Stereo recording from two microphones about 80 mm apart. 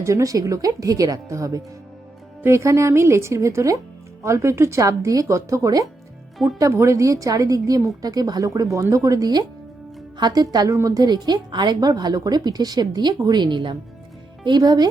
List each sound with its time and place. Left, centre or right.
0.0 s speech: right
14.4 s speech: right